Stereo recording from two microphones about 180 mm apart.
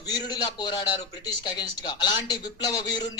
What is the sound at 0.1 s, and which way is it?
A man's voice, 20° left (ahead or behind).